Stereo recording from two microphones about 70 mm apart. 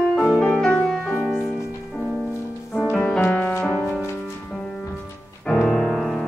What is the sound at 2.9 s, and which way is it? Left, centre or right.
Music, centre.